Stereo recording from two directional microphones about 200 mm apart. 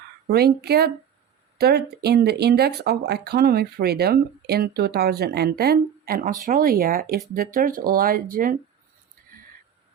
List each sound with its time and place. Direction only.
0.3 s speech: 50° right (ahead or behind)